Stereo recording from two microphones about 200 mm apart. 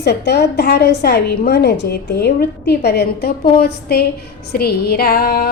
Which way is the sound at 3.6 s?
50° left (ahead or behind).